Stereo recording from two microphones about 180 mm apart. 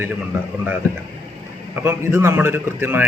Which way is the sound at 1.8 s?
15° right (ahead or behind).